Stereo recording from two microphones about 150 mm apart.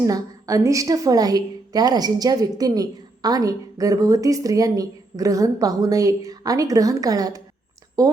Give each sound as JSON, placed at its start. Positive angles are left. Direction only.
{"t": 0.0, "sound": "a woman's voice", "side_deg": -25}